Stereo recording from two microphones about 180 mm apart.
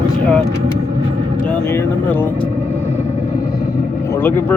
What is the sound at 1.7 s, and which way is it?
Speech, 10° left (ahead or behind).